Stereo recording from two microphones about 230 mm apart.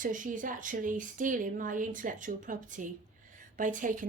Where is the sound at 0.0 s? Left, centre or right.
Right.